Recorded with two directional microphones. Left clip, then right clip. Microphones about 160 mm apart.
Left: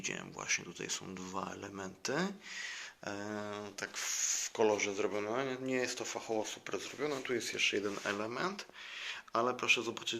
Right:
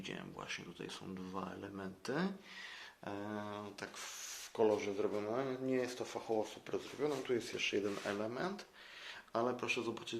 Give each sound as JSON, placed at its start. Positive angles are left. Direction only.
{"t": 0.0, "sound": "speech", "side_deg": 20}
{"t": 3.1, "sound": "speech", "side_deg": 10}
{"t": 7.9, "sound": "speech", "side_deg": 5}